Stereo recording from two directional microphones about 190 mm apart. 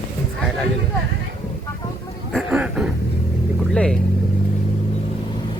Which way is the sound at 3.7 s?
5° left (ahead or behind).